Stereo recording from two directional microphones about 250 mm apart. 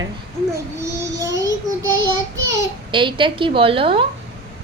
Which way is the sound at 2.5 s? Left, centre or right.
Centre.